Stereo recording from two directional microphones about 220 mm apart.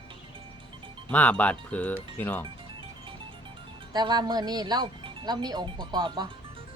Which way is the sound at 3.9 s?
20° right (ahead or behind).